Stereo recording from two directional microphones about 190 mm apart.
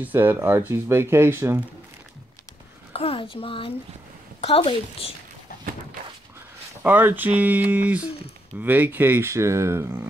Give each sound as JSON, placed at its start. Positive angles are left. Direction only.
{"t": 0.0, "sound": "speech", "side_deg": -10}
{"t": 2.9, "sound": "a child's voice", "side_deg": 30}
{"t": 6.8, "sound": "speech", "side_deg": -10}